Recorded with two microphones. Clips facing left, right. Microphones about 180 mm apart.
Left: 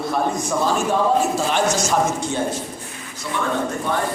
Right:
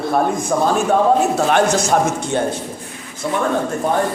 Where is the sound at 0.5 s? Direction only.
45° right (ahead or behind).